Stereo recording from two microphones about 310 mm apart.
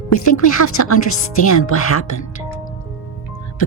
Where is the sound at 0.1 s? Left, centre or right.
Left.